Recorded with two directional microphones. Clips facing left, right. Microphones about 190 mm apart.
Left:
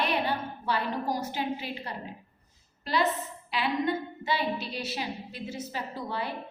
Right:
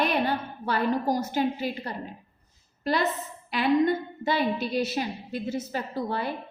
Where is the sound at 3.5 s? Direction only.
45° right (ahead or behind).